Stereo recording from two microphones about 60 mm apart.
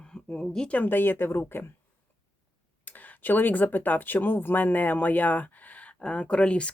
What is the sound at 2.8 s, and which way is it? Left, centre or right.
Speech, left.